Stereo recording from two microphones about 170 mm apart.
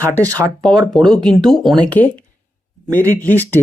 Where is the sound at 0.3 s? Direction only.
20° right (ahead or behind).